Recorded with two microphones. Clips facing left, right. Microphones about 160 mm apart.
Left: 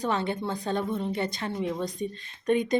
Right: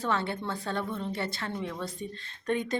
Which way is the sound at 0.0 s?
20° left (ahead or behind).